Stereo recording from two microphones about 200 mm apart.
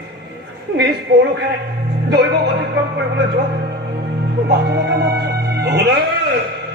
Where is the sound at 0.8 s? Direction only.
55° right (ahead or behind).